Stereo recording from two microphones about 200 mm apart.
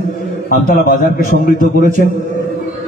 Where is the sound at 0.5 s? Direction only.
45° left (ahead or behind).